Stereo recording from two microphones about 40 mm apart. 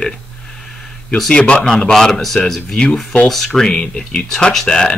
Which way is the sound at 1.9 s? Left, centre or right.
Centre.